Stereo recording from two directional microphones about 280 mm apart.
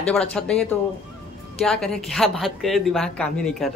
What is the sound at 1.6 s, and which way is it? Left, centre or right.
A woman's voice, centre.